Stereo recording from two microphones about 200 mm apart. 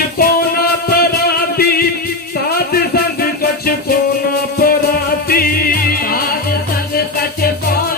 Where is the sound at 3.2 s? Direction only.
50° left (ahead or behind).